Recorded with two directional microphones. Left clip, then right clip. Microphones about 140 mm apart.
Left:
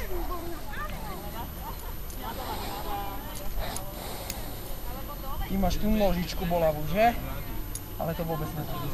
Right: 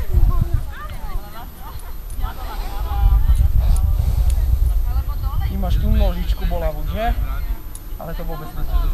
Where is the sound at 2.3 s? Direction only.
25° right (ahead or behind).